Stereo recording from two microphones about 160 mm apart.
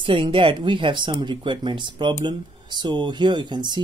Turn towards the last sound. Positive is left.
turn(degrees=-30)  # may be behind; listen again after turning